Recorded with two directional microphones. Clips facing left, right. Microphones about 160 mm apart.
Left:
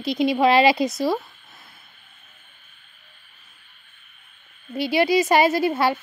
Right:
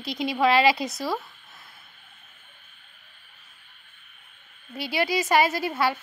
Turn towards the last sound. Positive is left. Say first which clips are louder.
# left 6 dB
turn(degrees=25)  # may be behind; listen again after turning